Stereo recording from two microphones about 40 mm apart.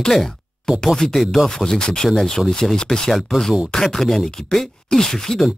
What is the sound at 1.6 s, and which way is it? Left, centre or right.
Speech, centre.